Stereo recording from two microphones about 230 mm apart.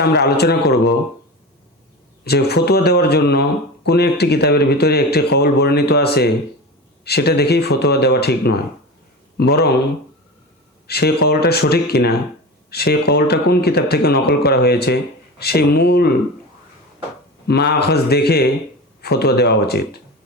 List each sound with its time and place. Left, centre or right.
0.0 s a man's voice: left
2.2 s a man's voice: left
10.8 s a man's voice: left
17.5 s a man's voice: left